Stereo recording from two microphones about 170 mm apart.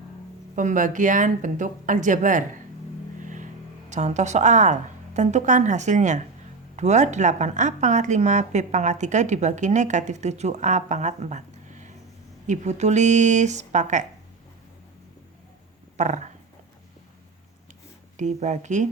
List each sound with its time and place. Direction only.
0.5 s a woman's voice: 50° right (ahead or behind)
16.0 s a woman's voice: 45° right (ahead or behind)
18.2 s a woman's voice: 45° right (ahead or behind)